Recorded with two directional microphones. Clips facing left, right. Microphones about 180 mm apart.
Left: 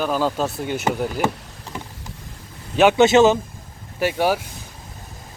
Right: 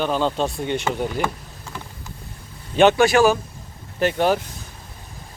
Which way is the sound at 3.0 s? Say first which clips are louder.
Left 2 dB; 20° left (ahead or behind).